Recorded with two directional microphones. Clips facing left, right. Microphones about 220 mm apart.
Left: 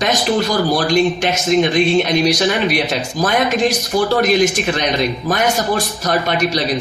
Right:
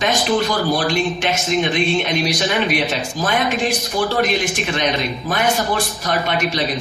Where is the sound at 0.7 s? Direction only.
40° left (ahead or behind).